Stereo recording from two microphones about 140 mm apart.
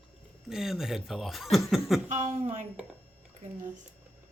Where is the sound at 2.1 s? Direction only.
60° right (ahead or behind).